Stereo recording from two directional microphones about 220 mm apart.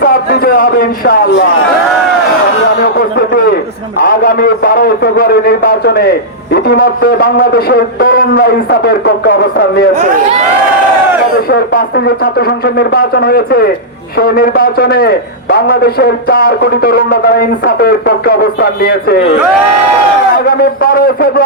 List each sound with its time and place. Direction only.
0.0 s a man's voice: 45° left (ahead or behind)
2.8 s a man's voice: 45° left (ahead or behind)
11.4 s a man's voice: 45° left (ahead or behind)
20.3 s a man's voice: 45° left (ahead or behind)